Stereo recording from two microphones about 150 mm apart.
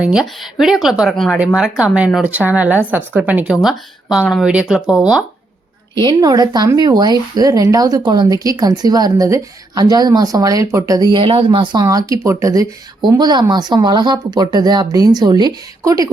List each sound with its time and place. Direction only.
0.0 s speech: 5° right (ahead or behind)
5.9 s speech: 30° right (ahead or behind)